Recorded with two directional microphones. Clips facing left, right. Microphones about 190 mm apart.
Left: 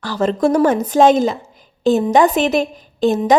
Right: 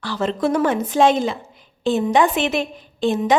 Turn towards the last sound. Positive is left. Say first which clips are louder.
# left 4 dB
turn(degrees=40)  # may be behind; listen again after turning